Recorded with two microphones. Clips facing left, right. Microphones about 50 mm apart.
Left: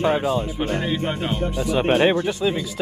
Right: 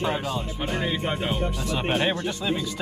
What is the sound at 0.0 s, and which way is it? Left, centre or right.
Speech, centre.